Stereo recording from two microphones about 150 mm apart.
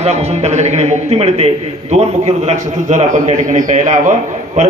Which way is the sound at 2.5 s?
55° right (ahead or behind).